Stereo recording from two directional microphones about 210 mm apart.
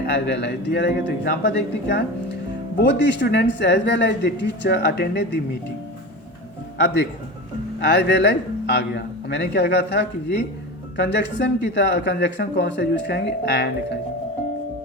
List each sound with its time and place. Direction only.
0.0 s speech: 50° left (ahead or behind)
6.7 s speech: 55° left (ahead or behind)